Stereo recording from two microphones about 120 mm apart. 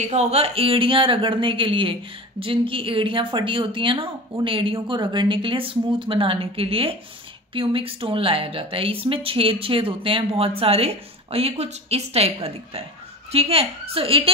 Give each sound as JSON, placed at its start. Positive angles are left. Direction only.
{"t": 0.0, "sound": "speech", "side_deg": -65}